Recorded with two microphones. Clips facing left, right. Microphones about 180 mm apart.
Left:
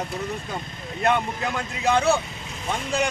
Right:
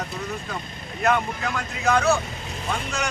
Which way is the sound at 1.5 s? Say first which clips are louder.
Even; 30° left (ahead or behind).